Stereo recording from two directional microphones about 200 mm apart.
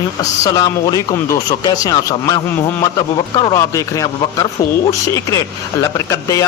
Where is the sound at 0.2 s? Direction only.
15° left (ahead or behind).